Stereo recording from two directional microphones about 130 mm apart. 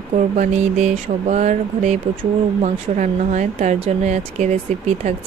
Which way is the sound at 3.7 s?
55° right (ahead or behind).